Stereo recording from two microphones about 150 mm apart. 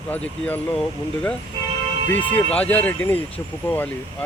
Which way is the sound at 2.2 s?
10° left (ahead or behind).